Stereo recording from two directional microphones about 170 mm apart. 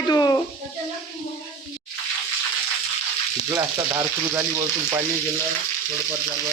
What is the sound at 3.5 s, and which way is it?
Frying, 15° right (ahead or behind).